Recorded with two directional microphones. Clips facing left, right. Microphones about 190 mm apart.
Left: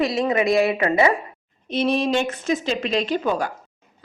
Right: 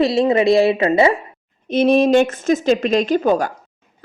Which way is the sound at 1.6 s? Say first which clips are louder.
Right 7 dB; 50° right (ahead or behind).